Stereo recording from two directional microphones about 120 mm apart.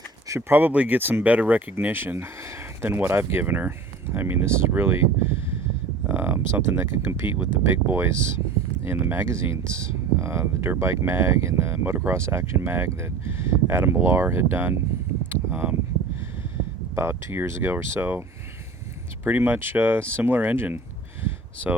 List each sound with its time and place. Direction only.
0.3 s speech: 20° right (ahead or behind)
6.1 s speech: 15° right (ahead or behind)
15.3 s a sound: 15° right (ahead or behind)
16.9 s speech: 20° right (ahead or behind)
19.2 s speech: 15° right (ahead or behind)